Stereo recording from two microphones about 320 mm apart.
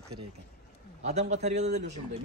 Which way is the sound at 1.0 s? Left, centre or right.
Right.